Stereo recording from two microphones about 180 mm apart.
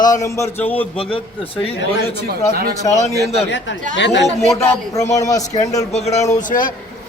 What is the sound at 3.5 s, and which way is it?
Speech, 85° left.